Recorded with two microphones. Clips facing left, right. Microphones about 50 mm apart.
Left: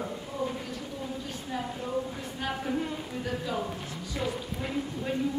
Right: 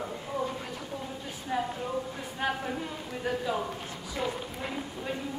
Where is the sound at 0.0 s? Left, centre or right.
Centre.